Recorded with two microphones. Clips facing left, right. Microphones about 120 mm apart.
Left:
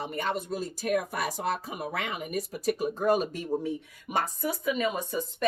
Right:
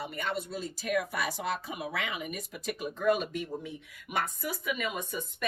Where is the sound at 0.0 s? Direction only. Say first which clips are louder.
Left 3 dB; 40° left (ahead or behind).